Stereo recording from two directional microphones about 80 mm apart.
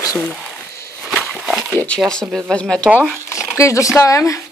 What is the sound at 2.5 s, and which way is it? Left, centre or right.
Speech, centre.